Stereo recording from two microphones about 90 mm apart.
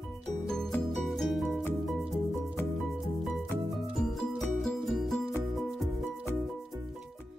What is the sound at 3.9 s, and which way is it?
Music, centre (ahead or behind).